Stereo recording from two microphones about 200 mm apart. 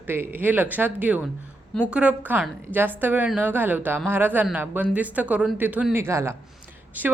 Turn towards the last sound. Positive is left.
turn(degrees=-10)  # may be behind; listen again after turning